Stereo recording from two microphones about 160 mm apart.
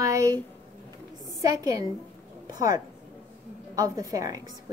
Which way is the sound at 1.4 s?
20° right (ahead or behind).